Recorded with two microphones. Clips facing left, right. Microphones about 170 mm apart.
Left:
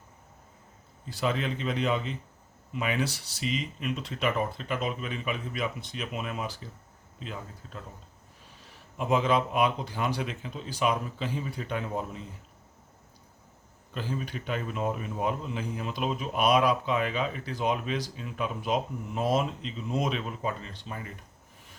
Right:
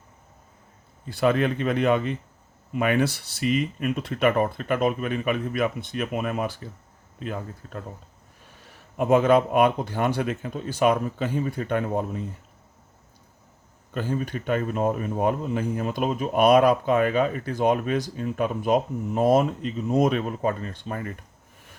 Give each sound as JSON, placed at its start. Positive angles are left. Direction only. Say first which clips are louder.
{"t": 1.1, "sound": "speech", "louder": "right 8 dB", "side_deg": -55}
{"t": 13.9, "sound": "speech", "louder": "right 6 dB", "side_deg": -50}